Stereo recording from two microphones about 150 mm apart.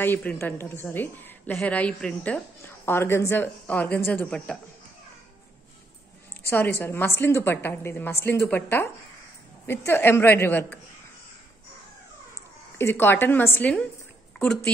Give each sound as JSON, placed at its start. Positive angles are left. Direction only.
{"t": 0.0, "sound": "a woman's voice", "side_deg": 10}
{"t": 6.5, "sound": "a woman's voice", "side_deg": 15}
{"t": 12.7, "sound": "a woman's voice", "side_deg": 15}